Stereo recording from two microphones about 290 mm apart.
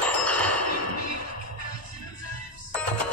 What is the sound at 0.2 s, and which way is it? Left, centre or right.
Music, centre.